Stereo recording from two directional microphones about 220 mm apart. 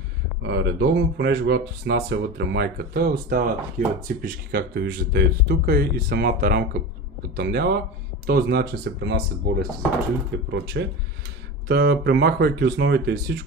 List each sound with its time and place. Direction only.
0.4 s speech: 50° right (ahead or behind)